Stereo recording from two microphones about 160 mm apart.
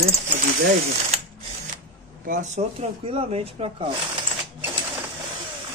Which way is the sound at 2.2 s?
50° right (ahead or behind).